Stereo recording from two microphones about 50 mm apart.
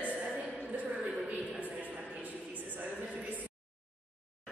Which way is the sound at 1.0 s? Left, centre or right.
Centre.